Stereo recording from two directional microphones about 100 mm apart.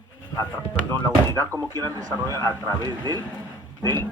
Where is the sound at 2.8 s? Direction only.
45° right (ahead or behind).